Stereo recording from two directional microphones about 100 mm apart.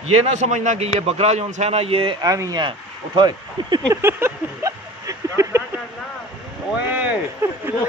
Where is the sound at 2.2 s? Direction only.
40° right (ahead or behind).